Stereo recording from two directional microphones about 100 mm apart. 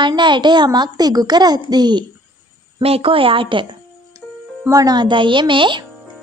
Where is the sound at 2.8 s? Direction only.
75° right (ahead or behind); by 3.8 s 55° right (ahead or behind).